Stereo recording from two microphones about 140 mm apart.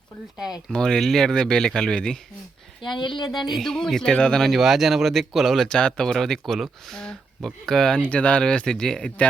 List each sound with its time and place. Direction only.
0.3 s speech: 5° right (ahead or behind)
2.8 s speech: 35° left (ahead or behind)
3.5 s speech: centre (ahead or behind)